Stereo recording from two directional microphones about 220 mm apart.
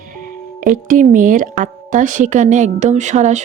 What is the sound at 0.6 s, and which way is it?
Speech, 35° right (ahead or behind).